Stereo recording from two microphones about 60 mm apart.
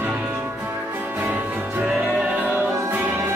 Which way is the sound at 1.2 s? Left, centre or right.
Right.